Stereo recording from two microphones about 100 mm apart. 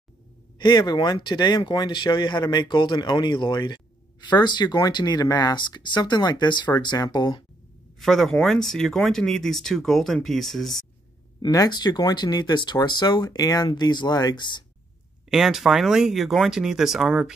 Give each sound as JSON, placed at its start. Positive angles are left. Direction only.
{"t": 0.6, "sound": "speech", "side_deg": 50}
{"t": 8.0, "sound": "speech", "side_deg": 5}
{"t": 11.4, "sound": "speech", "side_deg": 40}
{"t": 15.2, "sound": "speech", "side_deg": -5}